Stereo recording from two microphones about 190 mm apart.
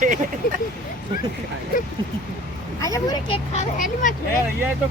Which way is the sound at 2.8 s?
15° left (ahead or behind).